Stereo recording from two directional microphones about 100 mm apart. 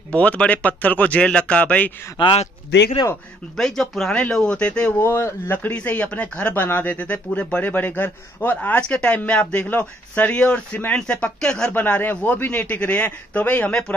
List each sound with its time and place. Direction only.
0.1 s speech: 15° left (ahead or behind)
2.1 s a man's voice: 55° left (ahead or behind)
3.5 s speech: 5° left (ahead or behind)
4.9 s speech: 25° left (ahead or behind)